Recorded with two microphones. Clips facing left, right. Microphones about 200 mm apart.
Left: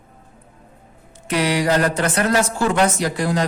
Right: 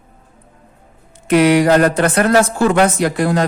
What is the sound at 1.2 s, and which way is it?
Speech, 55° right (ahead or behind).